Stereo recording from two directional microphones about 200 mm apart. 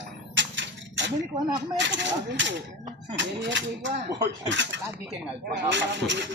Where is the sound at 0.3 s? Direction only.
65° right (ahead or behind).